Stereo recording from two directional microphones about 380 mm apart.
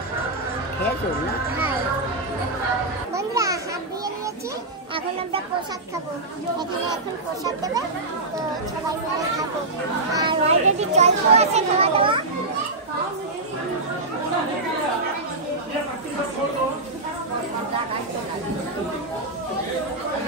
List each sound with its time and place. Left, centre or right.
3.2 s children playing: centre
10.1 s a child's voice: centre